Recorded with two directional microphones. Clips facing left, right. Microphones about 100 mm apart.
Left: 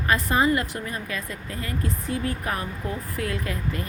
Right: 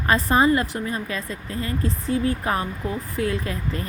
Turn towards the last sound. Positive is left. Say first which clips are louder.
# right 2 dB
turn(degrees=-30)  # may be behind; listen again after turning